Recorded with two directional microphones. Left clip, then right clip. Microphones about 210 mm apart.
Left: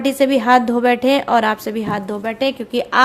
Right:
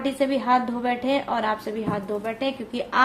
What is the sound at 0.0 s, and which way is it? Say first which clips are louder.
A woman's voice: left 8 dB; 45° left (ahead or behind).